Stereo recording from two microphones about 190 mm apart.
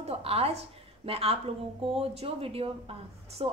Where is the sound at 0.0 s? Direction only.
30° right (ahead or behind).